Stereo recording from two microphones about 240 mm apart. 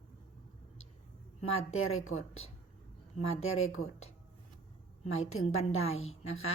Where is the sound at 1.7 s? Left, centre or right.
Left.